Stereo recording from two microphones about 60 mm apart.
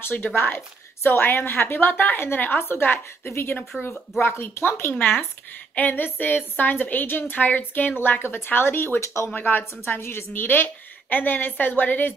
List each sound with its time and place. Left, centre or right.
0.1 s a woman's voice: left
4.9 s a woman's voice: left
9.3 s a woman's voice: left